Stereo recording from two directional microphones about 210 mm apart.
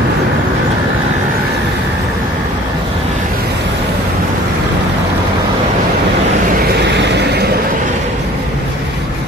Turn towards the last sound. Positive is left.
turn(degrees=-55)  # may be behind; listen again after turning